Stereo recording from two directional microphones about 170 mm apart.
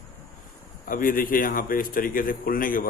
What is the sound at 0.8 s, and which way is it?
A man's voice, 55° left (ahead or behind).